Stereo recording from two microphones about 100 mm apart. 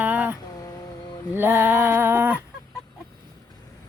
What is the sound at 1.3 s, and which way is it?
Speech, 20° right (ahead or behind).